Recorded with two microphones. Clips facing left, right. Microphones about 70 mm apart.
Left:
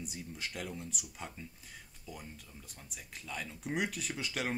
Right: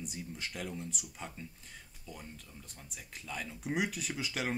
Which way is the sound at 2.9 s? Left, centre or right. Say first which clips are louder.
Right 1 dB; centre.